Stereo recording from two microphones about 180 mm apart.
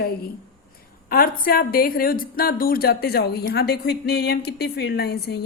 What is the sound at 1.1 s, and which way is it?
A woman's voice, 55° left (ahead or behind).